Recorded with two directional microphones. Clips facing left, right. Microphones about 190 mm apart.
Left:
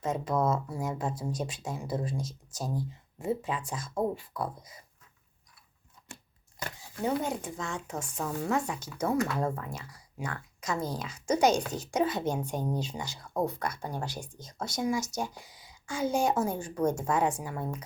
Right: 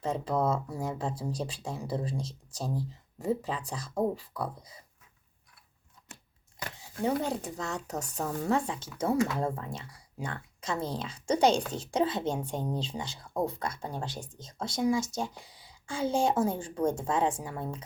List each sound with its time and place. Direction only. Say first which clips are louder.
0.0 s speech: even; 30° right (ahead or behind)
7.2 s speech: right 1 dB; 35° right (ahead or behind)